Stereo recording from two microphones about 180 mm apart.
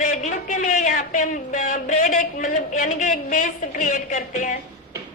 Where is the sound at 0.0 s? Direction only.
45° left (ahead or behind).